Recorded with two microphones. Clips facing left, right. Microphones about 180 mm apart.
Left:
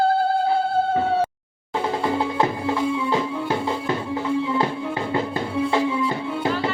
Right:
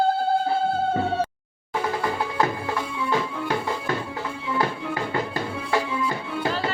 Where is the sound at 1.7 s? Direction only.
25° left (ahead or behind).